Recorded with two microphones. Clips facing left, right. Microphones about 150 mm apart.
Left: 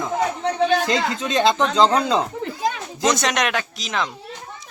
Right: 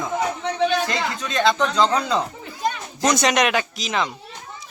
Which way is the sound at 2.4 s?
90° left.